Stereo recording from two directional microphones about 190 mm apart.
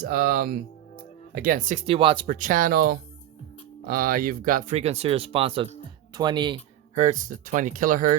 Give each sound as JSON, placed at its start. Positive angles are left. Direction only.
{"t": 0.0, "sound": "speech", "side_deg": -55}
{"t": 2.3, "sound": "speech", "side_deg": -45}
{"t": 6.9, "sound": "speech", "side_deg": -40}